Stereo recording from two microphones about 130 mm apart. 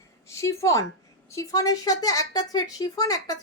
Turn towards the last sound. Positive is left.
turn(degrees=30)  # may be behind; listen again after turning